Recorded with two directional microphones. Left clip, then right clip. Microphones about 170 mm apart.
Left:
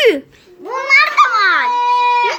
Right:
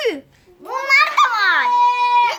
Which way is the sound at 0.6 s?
70° right (ahead or behind).